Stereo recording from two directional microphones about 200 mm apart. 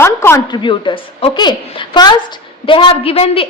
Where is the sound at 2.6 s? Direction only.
25° left (ahead or behind).